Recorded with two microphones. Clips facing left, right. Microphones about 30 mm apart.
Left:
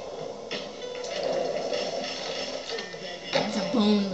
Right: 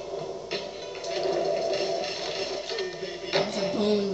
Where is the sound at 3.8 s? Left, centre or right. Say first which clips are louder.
Left 1 dB; left.